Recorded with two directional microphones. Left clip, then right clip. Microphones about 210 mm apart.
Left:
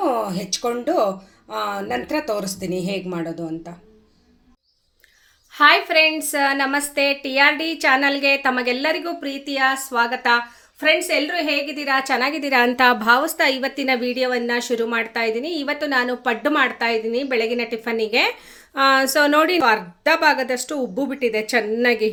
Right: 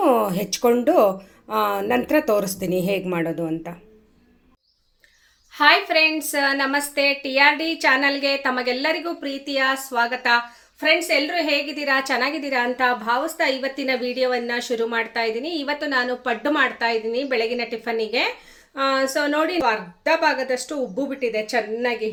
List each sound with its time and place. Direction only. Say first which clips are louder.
0.0 s speech: right 3 dB; 25° right (ahead or behind)
5.5 s a woman's voice: left 2 dB; 20° left (ahead or behind)
12.4 s a woman's voice: left 5 dB; 40° left (ahead or behind)
18.7 s a woman's voice: left 5 dB; 40° left (ahead or behind)